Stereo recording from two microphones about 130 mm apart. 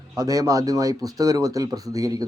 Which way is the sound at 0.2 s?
25° right (ahead or behind).